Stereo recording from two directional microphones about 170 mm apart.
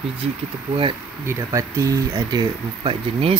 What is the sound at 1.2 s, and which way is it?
Speech, 20° right (ahead or behind).